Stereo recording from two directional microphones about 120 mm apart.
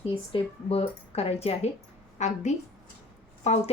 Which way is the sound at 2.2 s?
75° left (ahead or behind).